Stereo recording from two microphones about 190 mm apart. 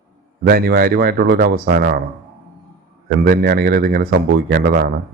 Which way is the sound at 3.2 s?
50° right (ahead or behind).